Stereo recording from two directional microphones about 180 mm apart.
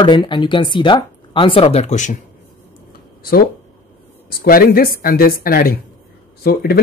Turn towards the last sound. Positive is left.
turn(degrees=60)  # may be behind; listen again after turning